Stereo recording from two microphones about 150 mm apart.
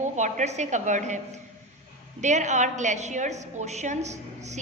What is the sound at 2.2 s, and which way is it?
A woman's voice, 50° right (ahead or behind).